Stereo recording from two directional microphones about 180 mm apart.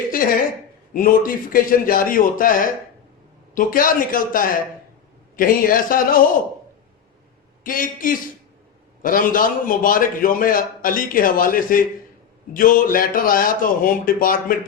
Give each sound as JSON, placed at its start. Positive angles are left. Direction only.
{"t": 0.1, "sound": "a sound", "side_deg": 50}
{"t": 0.9, "sound": "a man's voice", "side_deg": 50}
{"t": 7.6, "sound": "a man's voice", "side_deg": 50}